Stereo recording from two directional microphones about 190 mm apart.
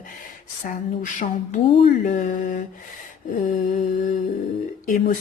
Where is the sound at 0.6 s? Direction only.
45° left (ahead or behind).